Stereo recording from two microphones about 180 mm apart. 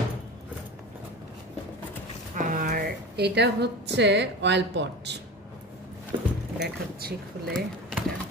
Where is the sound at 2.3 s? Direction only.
50° right (ahead or behind).